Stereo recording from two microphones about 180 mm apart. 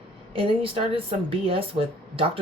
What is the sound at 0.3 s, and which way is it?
Speech, 30° right (ahead or behind).